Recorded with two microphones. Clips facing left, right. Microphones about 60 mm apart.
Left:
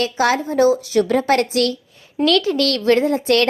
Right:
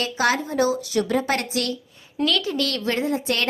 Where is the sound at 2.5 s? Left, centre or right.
Left.